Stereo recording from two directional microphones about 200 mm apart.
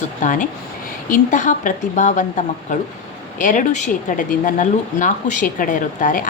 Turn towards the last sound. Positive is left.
turn(degrees=40)  # may be behind; listen again after turning